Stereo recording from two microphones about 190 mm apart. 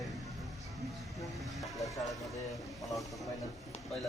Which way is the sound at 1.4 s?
Centre (ahead or behind).